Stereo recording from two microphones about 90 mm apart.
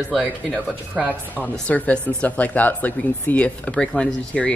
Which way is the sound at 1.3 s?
15° left (ahead or behind).